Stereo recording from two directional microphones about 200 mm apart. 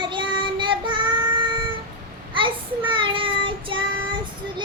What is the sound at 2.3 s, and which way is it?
Child singing, 25° right (ahead or behind).